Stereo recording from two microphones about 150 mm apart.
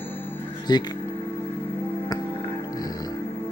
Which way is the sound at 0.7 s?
30° left (ahead or behind).